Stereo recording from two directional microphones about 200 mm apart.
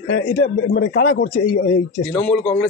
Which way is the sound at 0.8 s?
75° left (ahead or behind).